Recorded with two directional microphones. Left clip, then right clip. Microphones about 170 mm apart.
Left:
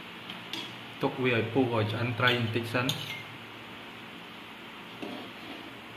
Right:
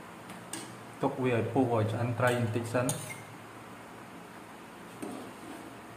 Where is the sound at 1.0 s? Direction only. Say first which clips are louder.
Left 2 dB; 5° right (ahead or behind).